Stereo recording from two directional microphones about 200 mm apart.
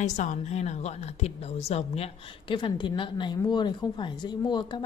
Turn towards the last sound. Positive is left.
turn(degrees=20)  # may be behind; listen again after turning